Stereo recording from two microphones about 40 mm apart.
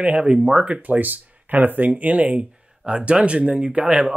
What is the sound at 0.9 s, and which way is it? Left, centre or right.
Speech, right.